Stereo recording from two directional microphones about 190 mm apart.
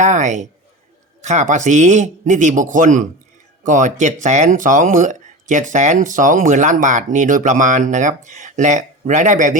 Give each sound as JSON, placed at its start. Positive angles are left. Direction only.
{"t": 0.0, "sound": "speech", "side_deg": -40}